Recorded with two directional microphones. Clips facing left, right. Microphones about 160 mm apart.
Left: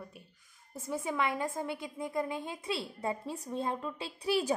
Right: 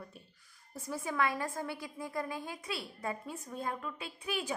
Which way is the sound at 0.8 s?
25° left (ahead or behind).